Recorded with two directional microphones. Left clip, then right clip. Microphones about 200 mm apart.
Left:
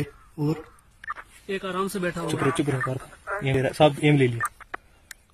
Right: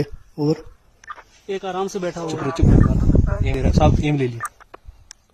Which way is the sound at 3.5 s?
Centre (ahead or behind).